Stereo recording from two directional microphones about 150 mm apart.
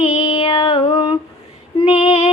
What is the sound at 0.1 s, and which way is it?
Female singing, 40° left (ahead or behind).